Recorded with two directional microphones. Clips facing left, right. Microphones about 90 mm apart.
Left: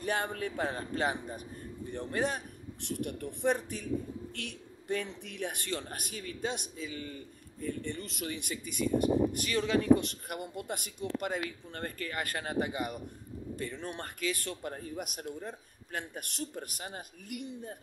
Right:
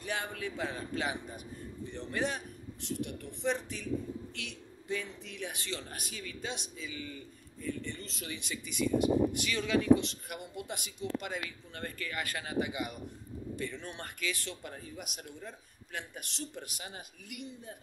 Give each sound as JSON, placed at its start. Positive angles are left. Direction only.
{"t": 0.0, "sound": "speech", "side_deg": 45}
{"t": 2.8, "sound": "speech", "side_deg": 50}
{"t": 4.4, "sound": "speech", "side_deg": 50}
{"t": 7.6, "sound": "speech", "side_deg": 55}